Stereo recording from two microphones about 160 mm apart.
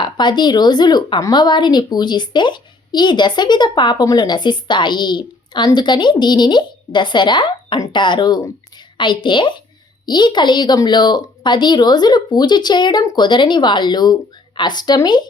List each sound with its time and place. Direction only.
0.0 s a woman's voice: 30° left (ahead or behind)